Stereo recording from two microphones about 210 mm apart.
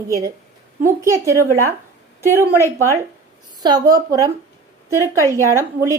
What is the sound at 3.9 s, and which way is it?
Speech, 15° right (ahead or behind).